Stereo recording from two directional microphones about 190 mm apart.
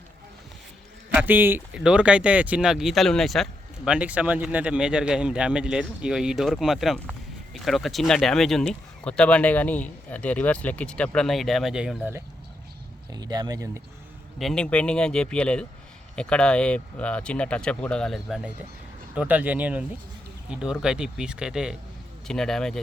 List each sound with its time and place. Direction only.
1.1 s speech: 10° right (ahead or behind)
13.1 s speech: 20° right (ahead or behind)
14.3 s speech: centre (ahead or behind)